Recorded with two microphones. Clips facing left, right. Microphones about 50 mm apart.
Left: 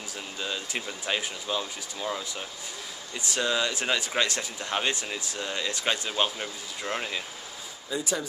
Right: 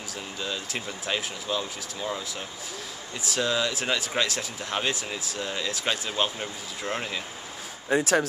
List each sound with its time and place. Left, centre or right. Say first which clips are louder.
0.4 s speech: even; centre
7.9 s speech: right 8 dB; right